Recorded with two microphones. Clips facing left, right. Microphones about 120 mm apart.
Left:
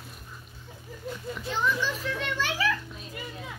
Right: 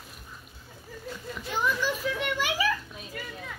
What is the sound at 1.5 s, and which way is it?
Children playing, 10° right (ahead or behind).